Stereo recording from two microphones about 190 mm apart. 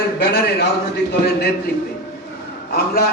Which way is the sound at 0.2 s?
55° left (ahead or behind).